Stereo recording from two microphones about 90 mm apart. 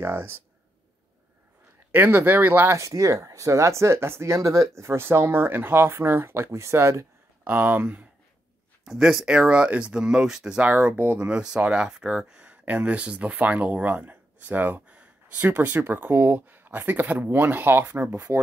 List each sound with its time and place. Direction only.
0.0 s speech: 25° right (ahead or behind)
1.9 s speech: 20° right (ahead or behind)
8.8 s speech: 5° right (ahead or behind)
10.7 s speech: 20° right (ahead or behind)
11.2 s speech: 10° right (ahead or behind)